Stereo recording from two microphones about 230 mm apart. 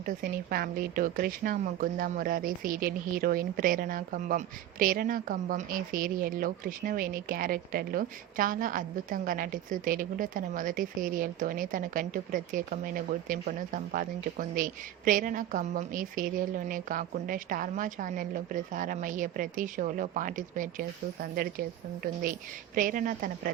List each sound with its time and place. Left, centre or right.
0.0 s a woman's voice: right
22.7 s a woman's voice: right